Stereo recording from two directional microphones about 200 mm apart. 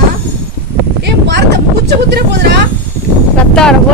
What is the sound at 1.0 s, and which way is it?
Speech, 60° right (ahead or behind).